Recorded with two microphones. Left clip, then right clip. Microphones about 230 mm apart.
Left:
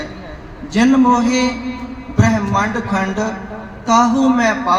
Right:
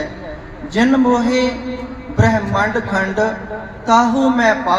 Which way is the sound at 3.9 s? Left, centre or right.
Centre.